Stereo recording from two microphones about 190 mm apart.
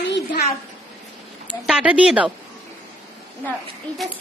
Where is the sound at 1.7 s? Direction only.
5° right (ahead or behind).